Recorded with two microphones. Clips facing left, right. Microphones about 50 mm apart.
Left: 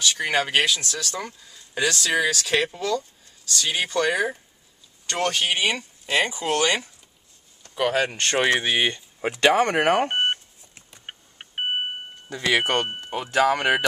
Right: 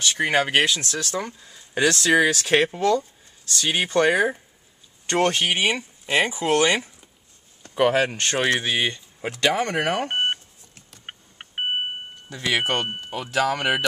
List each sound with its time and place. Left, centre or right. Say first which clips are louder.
0.0 s speech: right 2 dB; right
7.6 s a sound: right 4 dB; right
7.9 s speech: right 1 dB; centre; by 10.2 s left
11.1 s vehicle: right 1 dB; centre
12.3 s speech: left 2 dB; centre
13.3 s speech: left 2 dB; centre